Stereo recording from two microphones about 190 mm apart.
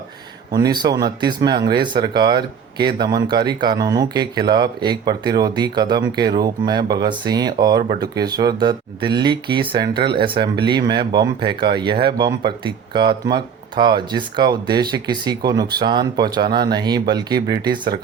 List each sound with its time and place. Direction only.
0.5 s speech: 20° right (ahead or behind)